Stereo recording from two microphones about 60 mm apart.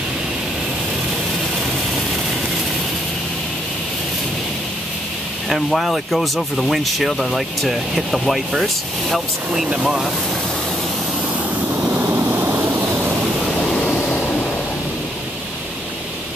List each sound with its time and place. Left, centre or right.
5.5 s speech: centre
9.8 s speech: centre
12.0 s vehicle: right
13.9 s a sound: centre